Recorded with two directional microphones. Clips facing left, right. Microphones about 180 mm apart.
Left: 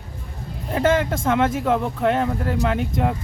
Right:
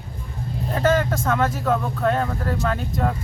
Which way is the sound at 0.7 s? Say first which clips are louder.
Left 1 dB; 25° left (ahead or behind).